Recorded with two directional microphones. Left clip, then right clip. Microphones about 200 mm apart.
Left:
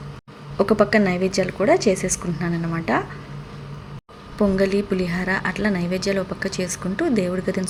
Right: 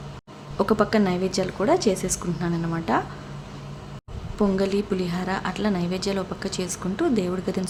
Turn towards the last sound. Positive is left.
turn(degrees=0)  # may be behind; listen again after turning